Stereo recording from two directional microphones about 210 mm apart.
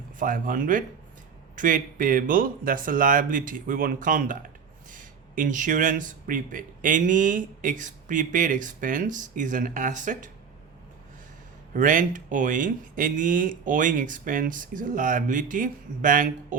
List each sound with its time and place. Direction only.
0.2 s speech: 40° right (ahead or behind)
11.7 s speech: 40° right (ahead or behind)